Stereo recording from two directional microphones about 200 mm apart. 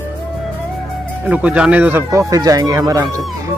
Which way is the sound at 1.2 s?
5° right (ahead or behind).